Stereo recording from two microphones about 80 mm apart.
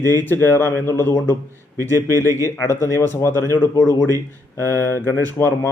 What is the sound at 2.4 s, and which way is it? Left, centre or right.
Speech, left.